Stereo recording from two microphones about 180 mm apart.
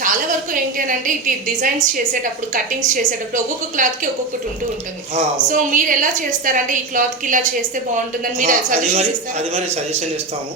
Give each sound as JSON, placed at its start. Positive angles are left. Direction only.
{"t": 0.9, "sound": "a woman's voice", "side_deg": -50}
{"t": 5.1, "sound": "a woman's voice", "side_deg": -45}
{"t": 9.0, "sound": "a man's voice", "side_deg": -35}